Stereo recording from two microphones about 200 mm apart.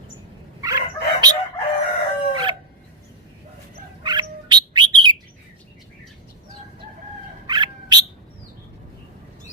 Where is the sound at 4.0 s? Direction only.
20° right (ahead or behind).